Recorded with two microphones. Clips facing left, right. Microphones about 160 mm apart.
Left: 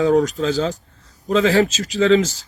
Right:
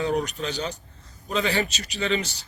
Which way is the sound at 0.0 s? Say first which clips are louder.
Left 9 dB; 90° left.